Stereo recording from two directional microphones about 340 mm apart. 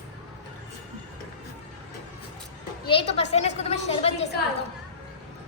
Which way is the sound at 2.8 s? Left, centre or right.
Centre.